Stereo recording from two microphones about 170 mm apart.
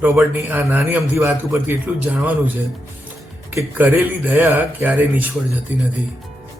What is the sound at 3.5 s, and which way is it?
A man's voice, 10° right (ahead or behind).